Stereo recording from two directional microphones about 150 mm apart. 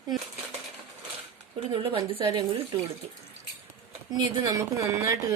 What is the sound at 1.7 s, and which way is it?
Speech, 35° right (ahead or behind).